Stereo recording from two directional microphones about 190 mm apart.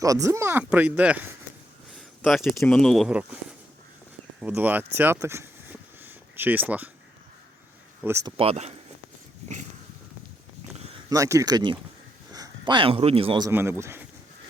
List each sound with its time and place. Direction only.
0.0 s speech: 15° right (ahead or behind)
4.4 s speech: 10° right (ahead or behind)
4.9 s a sound: 10° right (ahead or behind)
8.0 s speech: 15° right (ahead or behind)
8.4 s speech: 35° right (ahead or behind)
11.1 s speech: 15° right (ahead or behind)
13.5 s speech: 10° right (ahead or behind)